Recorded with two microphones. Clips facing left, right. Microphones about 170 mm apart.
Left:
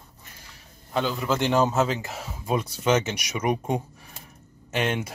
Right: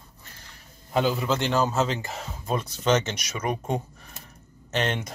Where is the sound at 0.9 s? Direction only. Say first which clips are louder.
Right 3 dB; 5° right (ahead or behind).